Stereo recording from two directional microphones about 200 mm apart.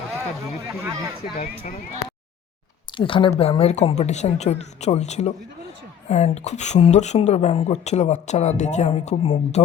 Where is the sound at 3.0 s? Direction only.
25° left (ahead or behind).